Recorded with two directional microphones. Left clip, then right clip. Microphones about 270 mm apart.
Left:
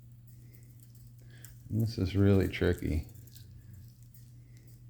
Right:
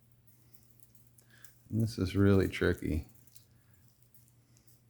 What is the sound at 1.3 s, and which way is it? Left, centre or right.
Speech, right.